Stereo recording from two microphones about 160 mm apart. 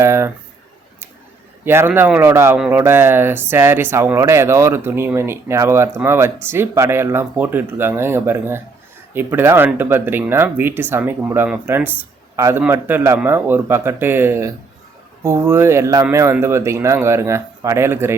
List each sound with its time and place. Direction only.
0.0 s speech: 15° right (ahead or behind)
1.6 s speech: 15° right (ahead or behind)